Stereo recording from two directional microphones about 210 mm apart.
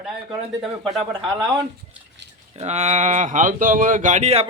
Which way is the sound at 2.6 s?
30° right (ahead or behind).